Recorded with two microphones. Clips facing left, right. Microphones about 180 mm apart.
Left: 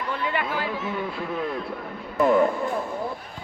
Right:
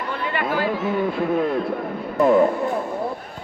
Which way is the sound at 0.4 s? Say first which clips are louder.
Right 6 dB; 40° right (ahead or behind).